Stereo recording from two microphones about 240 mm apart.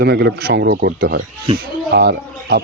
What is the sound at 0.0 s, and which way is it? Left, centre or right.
Speech, right.